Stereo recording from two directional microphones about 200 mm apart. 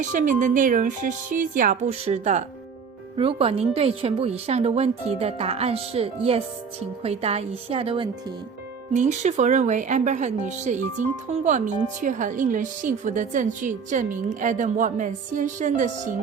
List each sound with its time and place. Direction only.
0.1 s a woman's voice: 40° right (ahead or behind)
9.0 s speech: 35° right (ahead or behind)